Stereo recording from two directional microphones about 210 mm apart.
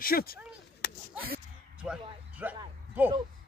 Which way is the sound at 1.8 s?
5° right (ahead or behind).